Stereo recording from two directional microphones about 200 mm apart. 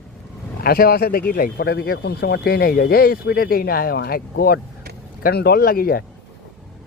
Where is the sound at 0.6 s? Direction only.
50° left (ahead or behind).